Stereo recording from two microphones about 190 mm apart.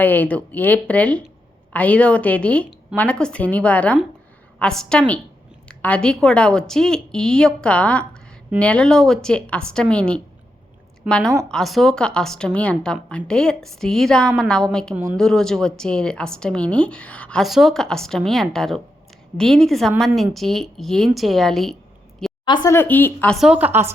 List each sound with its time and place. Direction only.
0.0 s a woman's voice: 10° left (ahead or behind)
11.4 s speech: centre (ahead or behind)
22.4 s speech: 25° left (ahead or behind)
22.7 s speech: 10° left (ahead or behind); by 23.9 s 10° right (ahead or behind)